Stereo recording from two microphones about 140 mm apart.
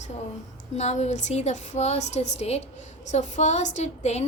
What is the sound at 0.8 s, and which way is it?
A woman's voice, 55° left (ahead or behind).